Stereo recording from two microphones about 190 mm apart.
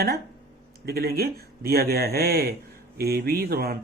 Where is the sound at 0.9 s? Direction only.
55° right (ahead or behind).